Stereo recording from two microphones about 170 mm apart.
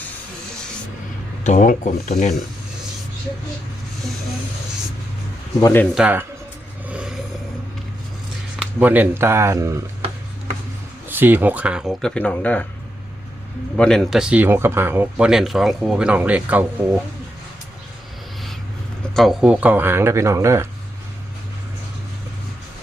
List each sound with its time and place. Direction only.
1.5 s speech: 45° left (ahead or behind)
5.5 s speech: 20° left (ahead or behind)
5.9 s speech: 5° right (ahead or behind)
6.8 s a sound: 5° right (ahead or behind)
8.8 s speech: 10° right (ahead or behind)
11.1 s speech: 10° right (ahead or behind); by 12.6 s 10° left (ahead or behind)
13.7 s speech: 5° left (ahead or behind)
19.1 s speech: centre (ahead or behind); by 20.7 s 15° right (ahead or behind)